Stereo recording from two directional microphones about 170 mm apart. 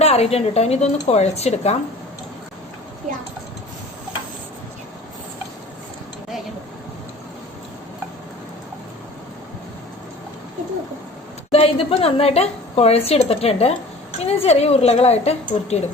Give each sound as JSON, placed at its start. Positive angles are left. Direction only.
{"t": 0.0, "sound": "a woman's voice", "side_deg": 35}
{"t": 11.5, "sound": "a woman's voice", "side_deg": 35}